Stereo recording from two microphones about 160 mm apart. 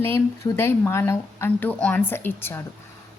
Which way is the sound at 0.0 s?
15° left (ahead or behind).